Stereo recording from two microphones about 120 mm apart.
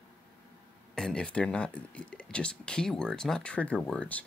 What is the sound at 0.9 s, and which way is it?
Speech, 5° left (ahead or behind).